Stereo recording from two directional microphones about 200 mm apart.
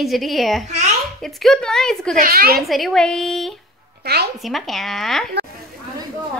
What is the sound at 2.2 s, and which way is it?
Speech, 50° right (ahead or behind).